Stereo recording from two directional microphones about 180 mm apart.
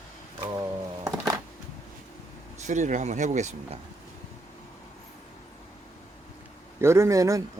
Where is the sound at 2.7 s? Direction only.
45° right (ahead or behind).